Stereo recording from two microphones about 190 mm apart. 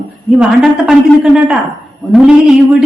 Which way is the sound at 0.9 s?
5° right (ahead or behind).